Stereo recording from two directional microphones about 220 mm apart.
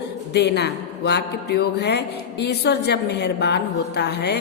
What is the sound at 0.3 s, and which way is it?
Speech, 50° left (ahead or behind).